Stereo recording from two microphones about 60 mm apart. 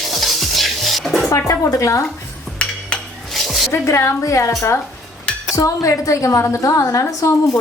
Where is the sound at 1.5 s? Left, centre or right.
Left.